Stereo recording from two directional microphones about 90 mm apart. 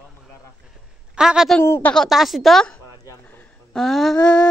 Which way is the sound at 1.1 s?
10° right (ahead or behind).